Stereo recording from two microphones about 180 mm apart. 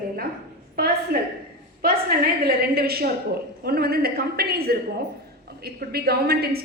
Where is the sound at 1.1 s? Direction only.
65° right (ahead or behind).